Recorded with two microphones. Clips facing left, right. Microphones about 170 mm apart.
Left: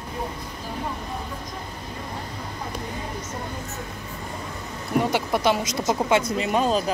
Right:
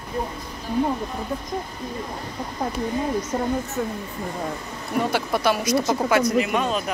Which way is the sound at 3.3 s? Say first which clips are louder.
Right 9 dB; 60° right (ahead or behind).